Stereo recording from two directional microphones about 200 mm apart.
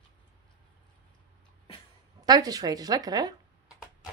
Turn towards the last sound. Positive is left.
turn(degrees=-20)  # may be behind; listen again after turning